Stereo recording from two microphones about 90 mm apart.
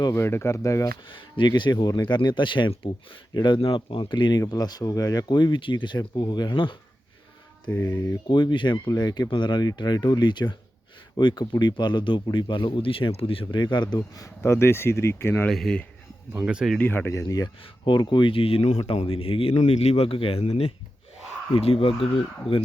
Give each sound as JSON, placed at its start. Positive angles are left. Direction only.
{"t": 0.1, "sound": "speech", "side_deg": 30}
{"t": 1.0, "sound": "speech", "side_deg": 65}
{"t": 3.8, "sound": "speech", "side_deg": 75}
{"t": 7.8, "sound": "speech", "side_deg": 30}
{"t": 8.3, "sound": "speech", "side_deg": 60}
{"t": 14.2, "sound": "speech", "side_deg": 30}
{"t": 15.4, "sound": "speech", "side_deg": 5}
{"t": 16.3, "sound": "speech", "side_deg": -10}
{"t": 16.7, "sound": "speech", "side_deg": 20}
{"t": 17.1, "sound": "speech", "side_deg": 40}
{"t": 17.6, "sound": "speech", "side_deg": 70}